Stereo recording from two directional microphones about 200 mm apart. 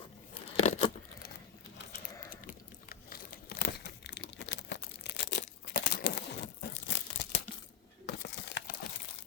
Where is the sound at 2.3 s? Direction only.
45° left (ahead or behind).